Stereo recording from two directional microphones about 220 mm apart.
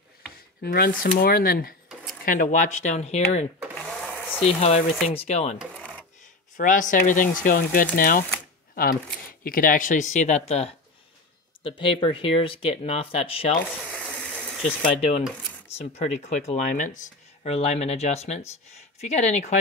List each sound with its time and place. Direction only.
0.6 s speech: 45° left (ahead or behind)
3.7 s a sound: centre (ahead or behind)
4.6 s speech: 30° left (ahead or behind)
5.6 s cash register: 5° right (ahead or behind)
6.5 s speech: 35° left (ahead or behind)
9.4 s speech: 40° left (ahead or behind)
13.8 s ratchet: 5° left (ahead or behind)
14.3 s water: centre (ahead or behind)
15.0 s speech: 30° left (ahead or behind)